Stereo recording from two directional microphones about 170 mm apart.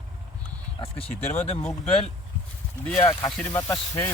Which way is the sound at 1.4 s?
40° left (ahead or behind).